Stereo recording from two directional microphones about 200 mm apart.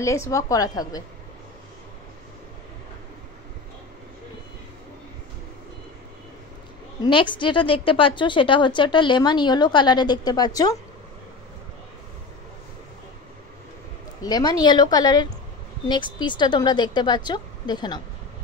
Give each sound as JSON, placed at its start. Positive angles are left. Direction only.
{"t": 0.0, "sound": "a woman's voice", "side_deg": 15}
{"t": 7.0, "sound": "speech", "side_deg": 25}
{"t": 14.2, "sound": "speech", "side_deg": 20}